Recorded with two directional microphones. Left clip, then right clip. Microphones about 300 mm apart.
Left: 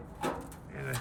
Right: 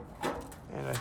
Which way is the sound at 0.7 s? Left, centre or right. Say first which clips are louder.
Right 3 dB; centre.